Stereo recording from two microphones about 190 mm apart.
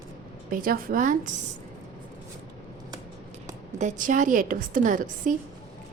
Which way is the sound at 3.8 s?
40° right (ahead or behind).